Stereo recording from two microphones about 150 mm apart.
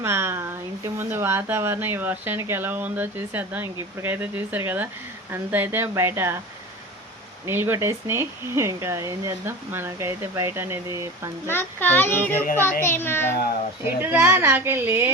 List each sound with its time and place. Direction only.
0.0 s speech: 15° right (ahead or behind)
7.4 s speech: 15° right (ahead or behind)
11.4 s speech: 15° left (ahead or behind)
13.8 s speech: 15° right (ahead or behind)